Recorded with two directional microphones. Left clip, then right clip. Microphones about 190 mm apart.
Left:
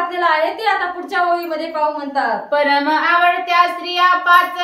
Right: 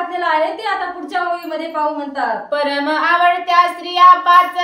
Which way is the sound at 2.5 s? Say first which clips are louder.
Left 4 dB; 15° right (ahead or behind).